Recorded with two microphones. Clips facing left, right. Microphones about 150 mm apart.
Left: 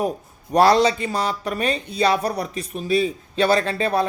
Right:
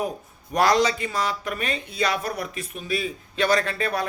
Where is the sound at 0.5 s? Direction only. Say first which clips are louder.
Left 5 dB; 30° left (ahead or behind).